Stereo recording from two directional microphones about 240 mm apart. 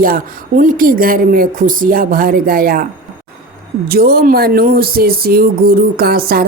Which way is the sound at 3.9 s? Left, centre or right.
Right.